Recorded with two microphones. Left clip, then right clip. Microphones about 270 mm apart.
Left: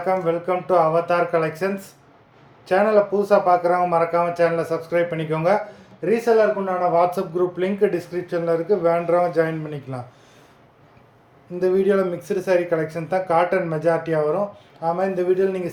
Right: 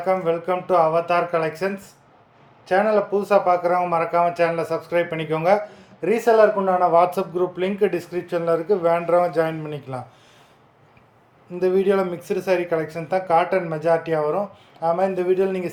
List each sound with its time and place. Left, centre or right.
0.0 s speech: centre
11.6 s speech: centre